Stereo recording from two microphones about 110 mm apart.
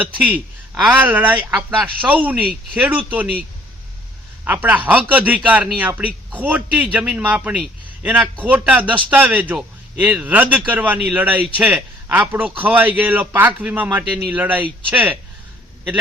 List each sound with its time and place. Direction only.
0.0 s speech: 15° right (ahead or behind)
4.4 s speech: 15° right (ahead or behind)